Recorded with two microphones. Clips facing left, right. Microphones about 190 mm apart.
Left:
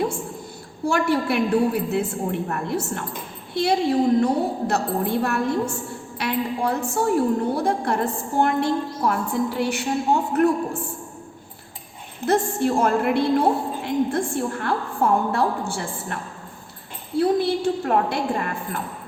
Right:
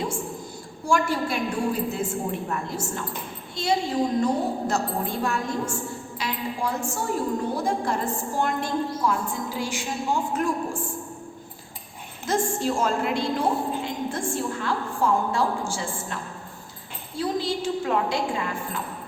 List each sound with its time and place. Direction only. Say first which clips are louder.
0.9 s a woman's voice: left 3 dB; 60° left (ahead or behind)
12.2 s a woman's voice: left 4 dB; 60° left (ahead or behind)